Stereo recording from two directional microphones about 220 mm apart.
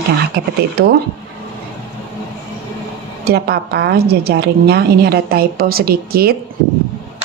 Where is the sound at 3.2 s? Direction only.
45° right (ahead or behind).